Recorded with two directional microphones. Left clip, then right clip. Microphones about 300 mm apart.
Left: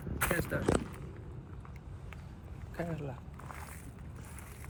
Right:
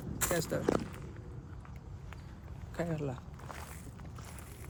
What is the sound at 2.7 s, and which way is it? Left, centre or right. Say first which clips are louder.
Speech: right 3 dB; right.